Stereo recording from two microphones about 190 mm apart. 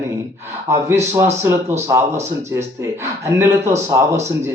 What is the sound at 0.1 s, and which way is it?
Speech, 15° right (ahead or behind).